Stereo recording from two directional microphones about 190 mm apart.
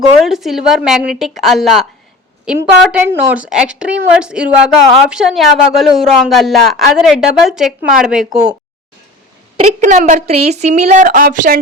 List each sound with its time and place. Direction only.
0.3 s a woman's voice: centre (ahead or behind)
9.6 s speech: 40° right (ahead or behind)